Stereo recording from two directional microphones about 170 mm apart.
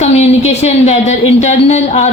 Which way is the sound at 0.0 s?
40° left (ahead or behind).